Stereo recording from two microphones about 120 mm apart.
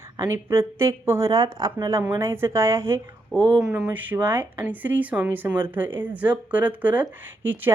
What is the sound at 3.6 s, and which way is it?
Speech, 5° right (ahead or behind).